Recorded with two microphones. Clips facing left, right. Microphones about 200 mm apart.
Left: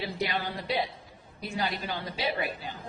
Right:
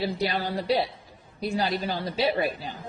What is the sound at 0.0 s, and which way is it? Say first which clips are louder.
A woman's voice: right 4 dB; 35° right (ahead or behind).